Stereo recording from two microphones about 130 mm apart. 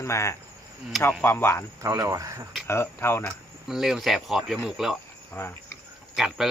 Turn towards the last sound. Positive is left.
turn(degrees=-5)  # may be behind; listen again after turning